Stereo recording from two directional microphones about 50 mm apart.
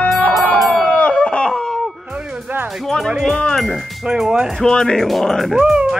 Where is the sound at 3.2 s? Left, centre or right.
Centre.